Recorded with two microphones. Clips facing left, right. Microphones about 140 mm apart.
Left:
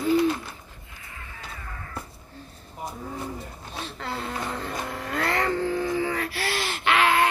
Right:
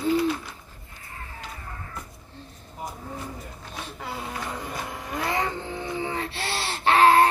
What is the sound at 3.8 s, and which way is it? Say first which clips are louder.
Vehicle: left 2 dB; 15° right (ahead or behind).